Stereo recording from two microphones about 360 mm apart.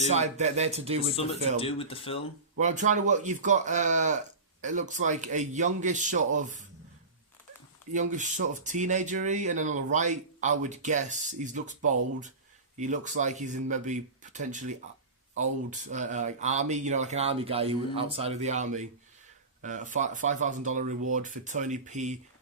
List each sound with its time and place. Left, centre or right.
0.1 s speech: centre
1.1 s speech: centre
2.6 s speech: centre
7.9 s speech: right